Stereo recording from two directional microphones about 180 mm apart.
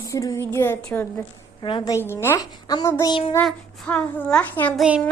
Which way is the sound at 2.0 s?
15° left (ahead or behind).